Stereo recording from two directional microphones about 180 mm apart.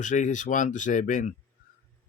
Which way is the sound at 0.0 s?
45° left (ahead or behind).